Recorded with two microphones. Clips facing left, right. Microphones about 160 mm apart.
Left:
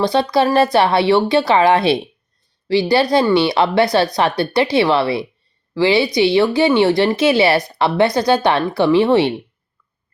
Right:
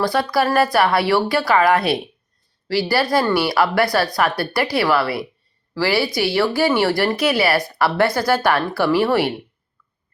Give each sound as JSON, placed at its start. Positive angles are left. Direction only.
{"t": 0.0, "sound": "a woman's voice", "side_deg": 25}